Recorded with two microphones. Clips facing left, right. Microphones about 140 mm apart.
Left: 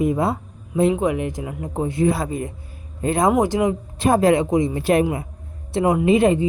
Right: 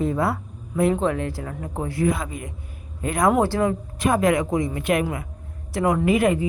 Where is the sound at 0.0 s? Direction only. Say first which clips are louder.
Left 3 dB; 20° left (ahead or behind).